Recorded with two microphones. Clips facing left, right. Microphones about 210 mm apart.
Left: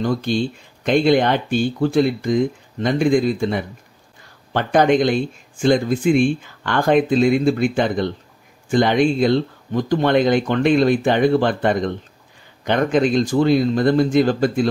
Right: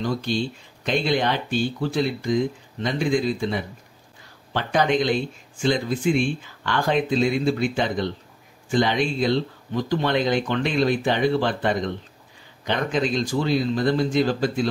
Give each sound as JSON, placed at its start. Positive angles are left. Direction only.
{"t": 0.0, "sound": "speech", "side_deg": 50}